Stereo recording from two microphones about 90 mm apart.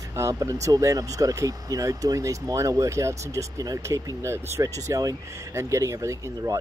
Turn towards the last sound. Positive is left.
turn(degrees=-40)  # may be behind; listen again after turning